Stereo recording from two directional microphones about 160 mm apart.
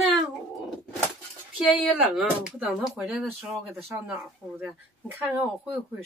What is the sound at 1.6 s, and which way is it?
Speech, centre (ahead or behind).